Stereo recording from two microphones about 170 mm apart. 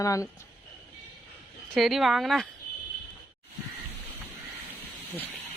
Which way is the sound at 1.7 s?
Centre (ahead or behind).